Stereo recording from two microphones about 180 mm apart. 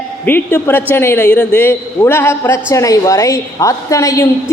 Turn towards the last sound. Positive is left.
turn(degrees=15)  # may be behind; listen again after turning